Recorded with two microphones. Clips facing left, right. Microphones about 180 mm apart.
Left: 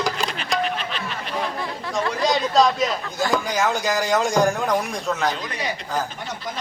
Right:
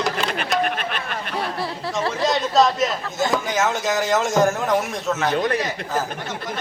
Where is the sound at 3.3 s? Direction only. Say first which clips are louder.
Left 1 dB; centre (ahead or behind).